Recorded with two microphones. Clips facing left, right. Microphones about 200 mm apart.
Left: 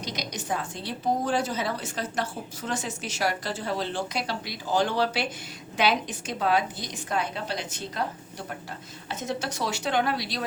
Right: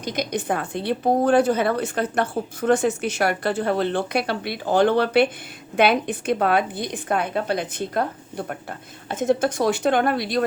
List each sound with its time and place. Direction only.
0.0 s a woman's voice: 55° right (ahead or behind)